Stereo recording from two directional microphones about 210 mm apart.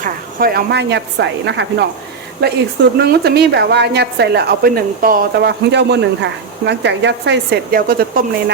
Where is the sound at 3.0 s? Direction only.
50° right (ahead or behind).